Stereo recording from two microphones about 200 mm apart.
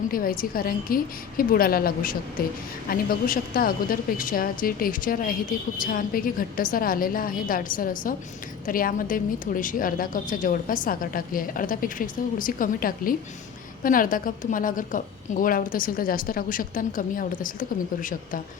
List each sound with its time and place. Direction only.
0.1 s a woman's voice: 45° left (ahead or behind)